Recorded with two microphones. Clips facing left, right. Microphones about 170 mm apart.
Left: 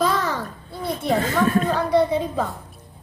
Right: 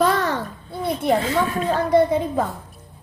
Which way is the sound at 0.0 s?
60° right (ahead or behind).